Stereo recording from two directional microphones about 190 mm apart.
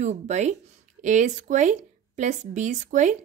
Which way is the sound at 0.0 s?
35° right (ahead or behind).